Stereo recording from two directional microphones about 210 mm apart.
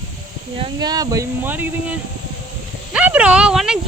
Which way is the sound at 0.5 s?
20° right (ahead or behind).